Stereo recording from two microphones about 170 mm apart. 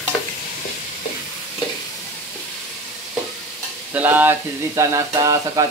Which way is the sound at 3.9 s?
10° right (ahead or behind).